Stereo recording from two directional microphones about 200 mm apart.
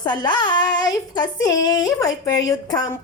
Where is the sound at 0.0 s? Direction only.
20° left (ahead or behind).